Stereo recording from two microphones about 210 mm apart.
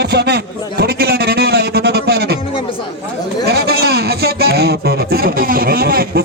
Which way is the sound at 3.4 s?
50° right (ahead or behind).